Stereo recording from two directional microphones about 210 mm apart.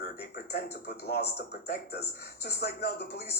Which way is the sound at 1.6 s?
50° left (ahead or behind).